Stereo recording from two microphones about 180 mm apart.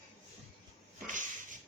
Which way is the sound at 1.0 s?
45° right (ahead or behind).